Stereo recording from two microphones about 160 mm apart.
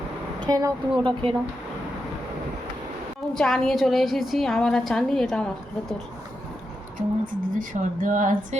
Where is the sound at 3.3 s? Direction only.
5° left (ahead or behind).